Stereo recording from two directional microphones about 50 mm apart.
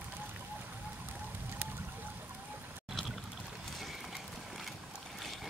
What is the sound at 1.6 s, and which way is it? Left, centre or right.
Vehicle, right.